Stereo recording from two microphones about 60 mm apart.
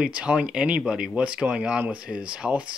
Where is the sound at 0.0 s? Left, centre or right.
Centre.